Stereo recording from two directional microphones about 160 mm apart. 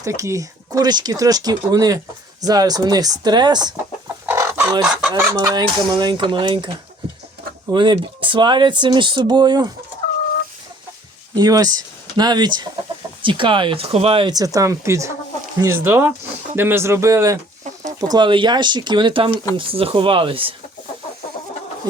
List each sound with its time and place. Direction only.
0.0 s speech: 20° right (ahead or behind)
4.3 s fowl: 15° right (ahead or behind)
4.8 s chicken: 5° right (ahead or behind)
5.1 s speech: 20° right (ahead or behind)
11.3 s speech: 25° right (ahead or behind)
18.1 s speech: 30° right (ahead or behind)